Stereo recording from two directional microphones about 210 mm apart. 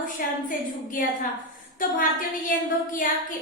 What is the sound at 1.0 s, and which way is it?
Speech, 40° left (ahead or behind).